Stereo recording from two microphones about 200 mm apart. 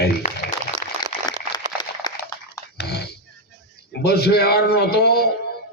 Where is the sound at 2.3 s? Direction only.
15° left (ahead or behind).